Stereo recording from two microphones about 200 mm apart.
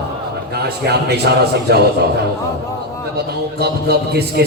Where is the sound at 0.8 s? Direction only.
55° right (ahead or behind).